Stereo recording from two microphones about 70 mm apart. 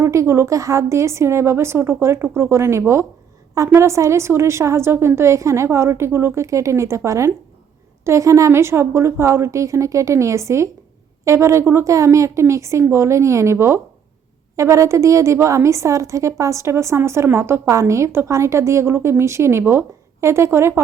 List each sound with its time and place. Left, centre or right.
0.0 s a woman's voice: right
17.7 s a woman's voice: right